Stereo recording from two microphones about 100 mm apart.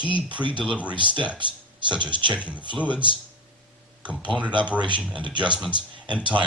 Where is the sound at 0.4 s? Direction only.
15° right (ahead or behind).